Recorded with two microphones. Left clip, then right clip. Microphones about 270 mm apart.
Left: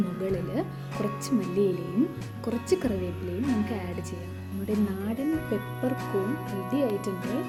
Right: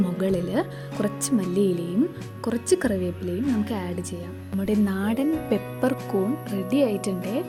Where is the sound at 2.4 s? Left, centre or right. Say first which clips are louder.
Right 4 dB; right.